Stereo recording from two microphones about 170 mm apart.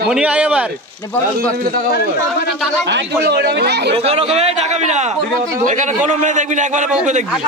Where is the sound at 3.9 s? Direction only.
35° right (ahead or behind).